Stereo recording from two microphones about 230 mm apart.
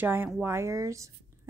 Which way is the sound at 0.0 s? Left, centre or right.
Centre.